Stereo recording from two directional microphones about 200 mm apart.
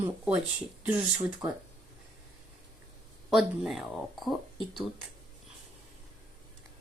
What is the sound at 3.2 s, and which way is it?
Speech, 5° right (ahead or behind).